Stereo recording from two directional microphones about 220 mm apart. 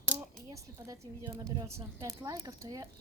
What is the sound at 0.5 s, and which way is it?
Speech, 15° right (ahead or behind).